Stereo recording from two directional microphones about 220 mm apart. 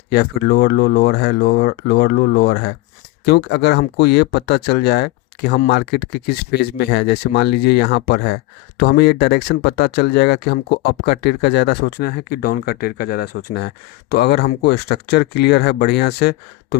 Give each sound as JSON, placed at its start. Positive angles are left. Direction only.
{"t": 0.1, "sound": "speech", "side_deg": 45}